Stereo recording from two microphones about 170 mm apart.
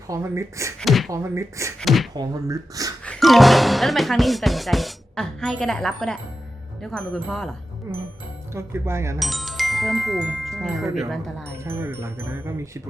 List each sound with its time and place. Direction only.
0.1 s speech: 15° right (ahead or behind)
0.8 s speech: centre (ahead or behind)
1.1 s speech: 15° right (ahead or behind)
1.8 s speech: centre (ahead or behind)
2.1 s speech: 20° right (ahead or behind)
3.1 s speech: centre (ahead or behind)
8.5 s speech: 15° right (ahead or behind)
9.1 s speech: centre (ahead or behind)
11.6 s speech: 15° right (ahead or behind)